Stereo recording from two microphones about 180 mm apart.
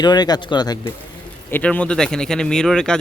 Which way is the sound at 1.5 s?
5° left (ahead or behind).